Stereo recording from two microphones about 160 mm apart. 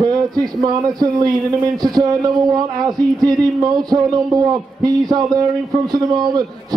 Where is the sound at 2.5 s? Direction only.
25° right (ahead or behind).